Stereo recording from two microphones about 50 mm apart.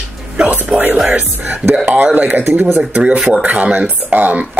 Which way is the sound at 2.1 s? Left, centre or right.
Right.